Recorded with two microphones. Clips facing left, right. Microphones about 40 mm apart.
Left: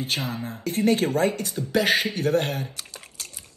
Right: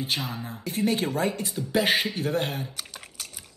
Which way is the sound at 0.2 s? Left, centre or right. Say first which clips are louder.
Left 3 dB; left.